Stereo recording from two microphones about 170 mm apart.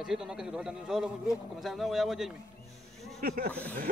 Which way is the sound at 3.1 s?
60° right (ahead or behind).